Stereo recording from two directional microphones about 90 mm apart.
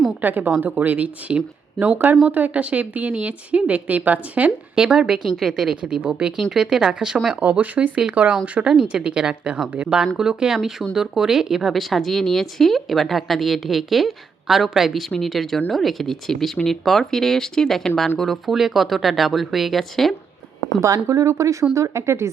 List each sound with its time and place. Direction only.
0.2 s a woman's voice: 20° right (ahead or behind); by 20.1 s centre (ahead or behind)
20.8 s speech: 35° right (ahead or behind)